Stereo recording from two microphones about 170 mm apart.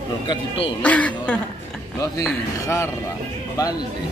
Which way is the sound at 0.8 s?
10° left (ahead or behind).